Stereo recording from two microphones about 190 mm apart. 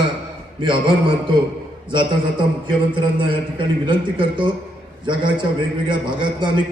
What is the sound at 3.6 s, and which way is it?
A man's voice, 25° right (ahead or behind).